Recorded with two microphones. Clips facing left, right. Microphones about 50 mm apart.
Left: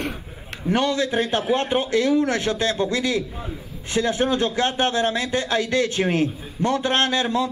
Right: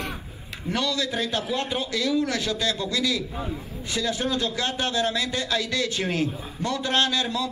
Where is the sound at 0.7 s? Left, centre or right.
Left.